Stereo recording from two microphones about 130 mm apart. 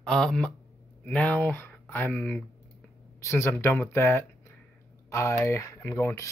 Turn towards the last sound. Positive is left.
turn(degrees=20)  # may be behind; listen again after turning